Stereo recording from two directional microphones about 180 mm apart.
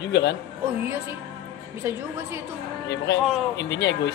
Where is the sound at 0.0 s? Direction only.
65° left (ahead or behind).